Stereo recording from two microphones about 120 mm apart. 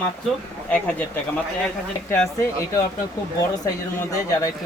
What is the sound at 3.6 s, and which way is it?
Speech, 30° left (ahead or behind).